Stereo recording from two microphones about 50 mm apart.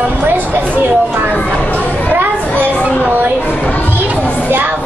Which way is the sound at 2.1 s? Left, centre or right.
Right.